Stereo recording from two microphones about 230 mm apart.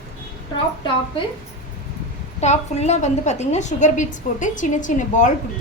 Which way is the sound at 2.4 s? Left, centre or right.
Left.